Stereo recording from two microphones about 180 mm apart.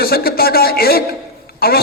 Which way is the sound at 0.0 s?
55° left (ahead or behind).